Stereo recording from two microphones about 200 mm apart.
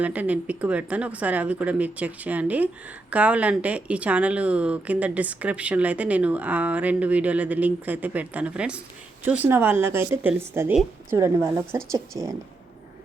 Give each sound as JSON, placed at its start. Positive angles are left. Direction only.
{"t": 0.0, "sound": "speech", "side_deg": -5}